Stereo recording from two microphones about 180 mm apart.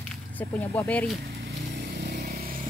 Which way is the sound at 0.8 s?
5° left (ahead or behind).